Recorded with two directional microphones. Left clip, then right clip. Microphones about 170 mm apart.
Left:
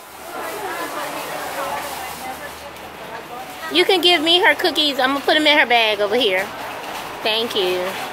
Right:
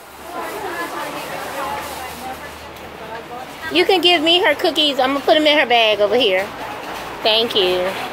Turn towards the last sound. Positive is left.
turn(degrees=20)  # may be behind; listen again after turning